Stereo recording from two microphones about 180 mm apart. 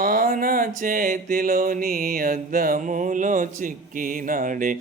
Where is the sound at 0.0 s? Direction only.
55° right (ahead or behind).